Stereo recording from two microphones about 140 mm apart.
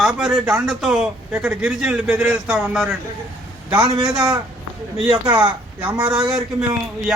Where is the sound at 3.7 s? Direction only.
30° right (ahead or behind).